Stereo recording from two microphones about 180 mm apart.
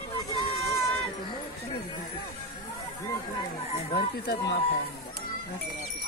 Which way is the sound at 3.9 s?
60° left (ahead or behind).